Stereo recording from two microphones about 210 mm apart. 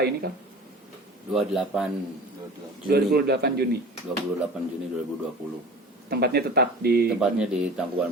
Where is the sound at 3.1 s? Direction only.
50° right (ahead or behind).